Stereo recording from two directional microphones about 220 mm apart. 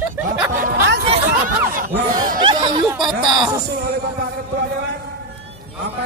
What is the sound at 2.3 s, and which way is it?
Speech, 20° right (ahead or behind).